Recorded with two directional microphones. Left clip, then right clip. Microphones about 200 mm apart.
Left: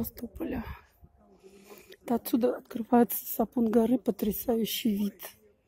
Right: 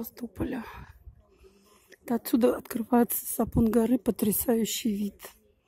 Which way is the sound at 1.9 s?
10° right (ahead or behind).